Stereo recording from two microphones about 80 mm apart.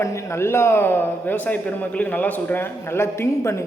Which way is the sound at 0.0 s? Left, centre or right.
Left.